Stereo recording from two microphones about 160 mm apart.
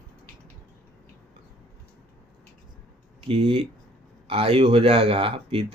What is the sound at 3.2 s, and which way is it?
Speech, 35° right (ahead or behind).